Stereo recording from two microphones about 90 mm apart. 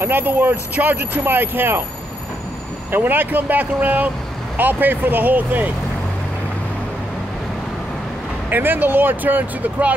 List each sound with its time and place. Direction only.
0.0 s speech: 20° right (ahead or behind)
2.9 s speech: 20° right (ahead or behind)
8.5 s speech: 20° right (ahead or behind)